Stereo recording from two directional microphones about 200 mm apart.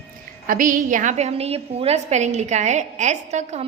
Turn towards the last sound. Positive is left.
turn(degrees=-35)  # may be behind; listen again after turning